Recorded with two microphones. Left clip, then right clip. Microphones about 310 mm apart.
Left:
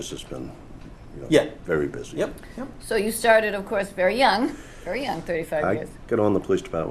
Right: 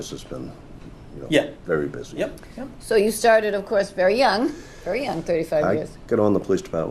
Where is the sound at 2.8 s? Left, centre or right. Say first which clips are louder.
Right 3 dB; right.